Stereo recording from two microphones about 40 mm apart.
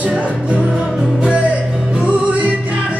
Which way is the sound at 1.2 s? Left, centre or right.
Right.